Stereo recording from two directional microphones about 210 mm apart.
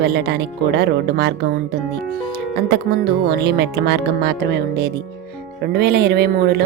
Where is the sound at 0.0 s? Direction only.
50° right (ahead or behind).